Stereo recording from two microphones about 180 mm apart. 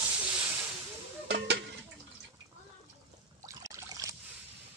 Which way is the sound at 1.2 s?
75° right (ahead or behind).